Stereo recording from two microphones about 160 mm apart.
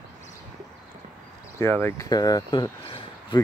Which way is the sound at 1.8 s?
20° left (ahead or behind).